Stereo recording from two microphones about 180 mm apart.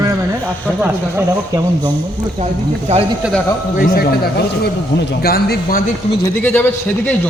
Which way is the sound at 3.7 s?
55° left (ahead or behind).